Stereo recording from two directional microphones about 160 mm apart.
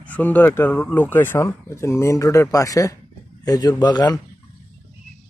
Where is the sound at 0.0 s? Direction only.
10° left (ahead or behind).